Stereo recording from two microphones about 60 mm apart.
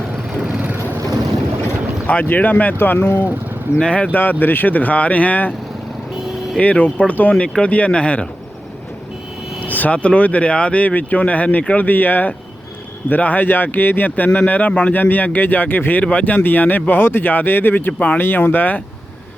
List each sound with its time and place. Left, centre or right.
2.2 s speech: left
3.8 s speech: centre
4.1 s speech: left
6.6 s speech: left
9.6 s speech: left